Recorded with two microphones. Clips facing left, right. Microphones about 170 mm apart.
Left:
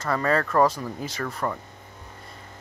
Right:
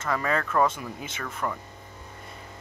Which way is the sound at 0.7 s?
35° left (ahead or behind).